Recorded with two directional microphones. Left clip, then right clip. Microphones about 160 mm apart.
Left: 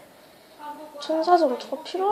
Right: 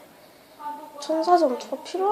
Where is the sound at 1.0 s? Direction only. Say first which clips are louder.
Even; 10° right (ahead or behind).